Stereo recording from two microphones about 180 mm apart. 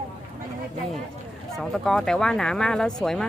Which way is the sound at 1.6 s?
Centre (ahead or behind).